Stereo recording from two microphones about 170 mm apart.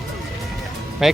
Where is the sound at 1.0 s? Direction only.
Centre (ahead or behind).